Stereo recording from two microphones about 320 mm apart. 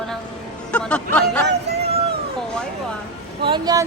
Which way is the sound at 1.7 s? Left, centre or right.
Right.